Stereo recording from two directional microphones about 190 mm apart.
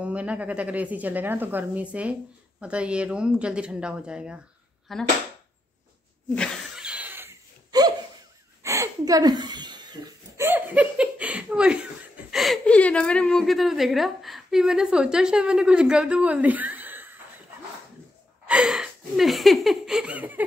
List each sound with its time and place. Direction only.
0.0 s speech: 5° right (ahead or behind)
6.8 s a sound: 5° right (ahead or behind); by 9.8 s 20° right (ahead or behind)
10.3 s speech: 10° right (ahead or behind)
18.5 s speech: 5° right (ahead or behind)